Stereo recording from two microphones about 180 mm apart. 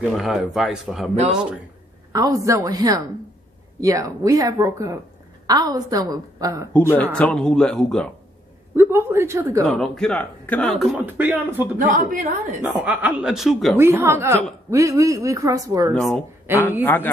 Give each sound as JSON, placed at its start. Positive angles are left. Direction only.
{"t": 0.2, "sound": "speech", "side_deg": 0}
{"t": 2.1, "sound": "speech", "side_deg": -20}
{"t": 6.9, "sound": "speech", "side_deg": 5}
{"t": 8.7, "sound": "a woman's voice", "side_deg": -15}
{"t": 9.6, "sound": "speech", "side_deg": 5}
{"t": 11.9, "sound": "a woman's voice", "side_deg": -50}
{"t": 12.6, "sound": "speech", "side_deg": -10}
{"t": 13.7, "sound": "a woman's voice", "side_deg": -15}
{"t": 15.9, "sound": "speech", "side_deg": 0}
{"t": 16.5, "sound": "a woman's voice", "side_deg": -10}
{"t": 16.8, "sound": "a woman's voice", "side_deg": 10}